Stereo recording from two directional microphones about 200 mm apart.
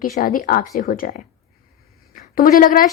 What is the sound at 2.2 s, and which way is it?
Speech, 45° left (ahead or behind).